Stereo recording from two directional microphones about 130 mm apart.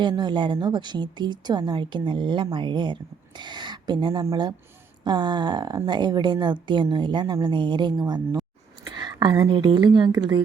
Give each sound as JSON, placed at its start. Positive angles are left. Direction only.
{"t": 0.0, "sound": "a woman's voice", "side_deg": -35}